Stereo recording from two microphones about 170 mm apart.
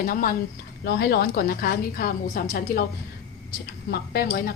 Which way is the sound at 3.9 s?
65° left (ahead or behind).